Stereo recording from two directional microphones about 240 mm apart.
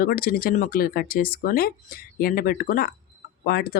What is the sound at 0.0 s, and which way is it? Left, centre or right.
Speech, left.